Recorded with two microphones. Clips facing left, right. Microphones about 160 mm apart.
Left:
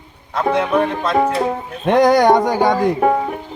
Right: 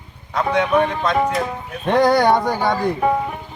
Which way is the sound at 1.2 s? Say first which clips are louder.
Left 4 dB; 30° left (ahead or behind).